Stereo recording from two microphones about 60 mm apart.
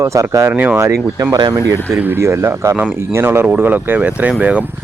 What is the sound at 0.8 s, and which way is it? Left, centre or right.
Speech, right.